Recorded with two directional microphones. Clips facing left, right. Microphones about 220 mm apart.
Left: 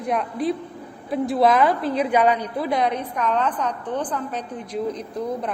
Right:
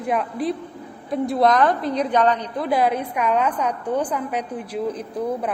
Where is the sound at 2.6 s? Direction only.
5° right (ahead or behind).